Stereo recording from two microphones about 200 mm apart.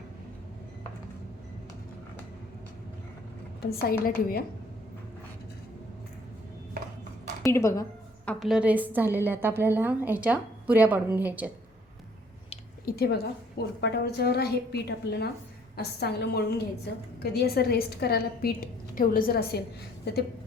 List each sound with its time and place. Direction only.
3.6 s a woman's voice: 50° left (ahead or behind)
7.4 s a woman's voice: 15° left (ahead or behind); by 11.5 s 10° right (ahead or behind)
12.8 s a woman's voice: 50° left (ahead or behind)